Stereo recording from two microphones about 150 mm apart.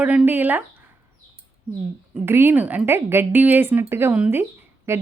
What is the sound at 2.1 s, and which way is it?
A woman's voice, 15° right (ahead or behind).